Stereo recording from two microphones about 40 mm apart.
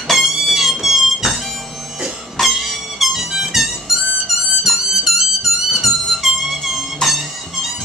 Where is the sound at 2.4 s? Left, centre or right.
Centre.